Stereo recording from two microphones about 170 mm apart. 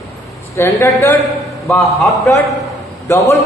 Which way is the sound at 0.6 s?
15° left (ahead or behind).